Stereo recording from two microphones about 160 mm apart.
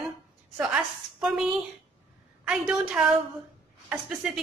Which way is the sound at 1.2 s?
Centre (ahead or behind).